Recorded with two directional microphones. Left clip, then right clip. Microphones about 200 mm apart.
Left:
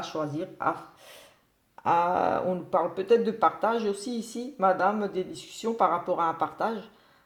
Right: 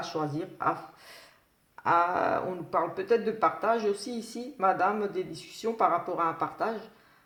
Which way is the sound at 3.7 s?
70° left (ahead or behind).